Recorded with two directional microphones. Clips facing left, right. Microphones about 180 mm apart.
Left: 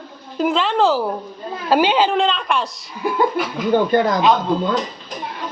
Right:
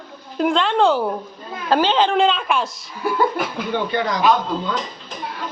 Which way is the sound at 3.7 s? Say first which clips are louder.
Left 6 dB; 45° left (ahead or behind).